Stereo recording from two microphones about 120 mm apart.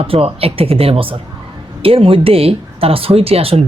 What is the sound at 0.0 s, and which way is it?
Speech, 50° right (ahead or behind).